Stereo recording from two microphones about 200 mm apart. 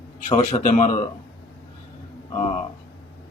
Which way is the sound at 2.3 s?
30° left (ahead or behind).